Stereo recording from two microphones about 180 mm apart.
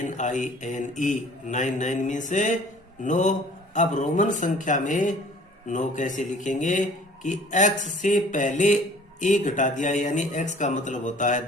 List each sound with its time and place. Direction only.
0.0 s a man's voice: 45° left (ahead or behind)